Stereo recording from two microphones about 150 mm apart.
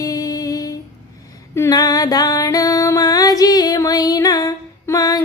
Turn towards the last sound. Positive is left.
turn(degrees=20)  # may be behind; listen again after turning